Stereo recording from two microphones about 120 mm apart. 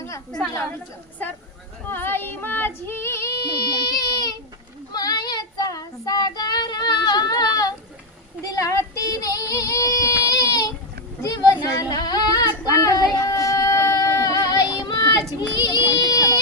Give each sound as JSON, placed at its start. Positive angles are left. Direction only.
{"t": 1.9, "sound": "female singing", "side_deg": 20}
{"t": 4.9, "sound": "child singing", "side_deg": 35}
{"t": 11.6, "sound": "female singing", "side_deg": 30}
{"t": 14.8, "sound": "child singing", "side_deg": 35}
{"t": 15.4, "sound": "speech", "side_deg": 35}
{"t": 15.9, "sound": "child singing", "side_deg": 30}